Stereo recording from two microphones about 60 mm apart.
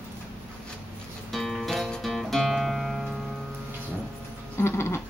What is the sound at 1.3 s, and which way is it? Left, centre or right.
Music, centre.